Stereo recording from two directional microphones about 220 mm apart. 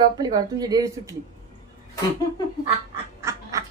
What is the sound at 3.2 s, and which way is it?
Quack, 15° right (ahead or behind).